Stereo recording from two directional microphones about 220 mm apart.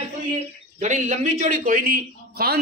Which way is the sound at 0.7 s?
35° right (ahead or behind).